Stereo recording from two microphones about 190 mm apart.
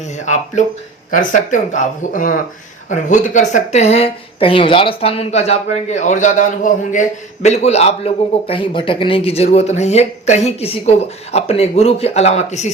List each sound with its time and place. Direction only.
1.1 s a man's voice: 45° left (ahead or behind)